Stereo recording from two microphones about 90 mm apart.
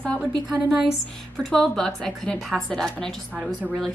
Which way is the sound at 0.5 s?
5° right (ahead or behind).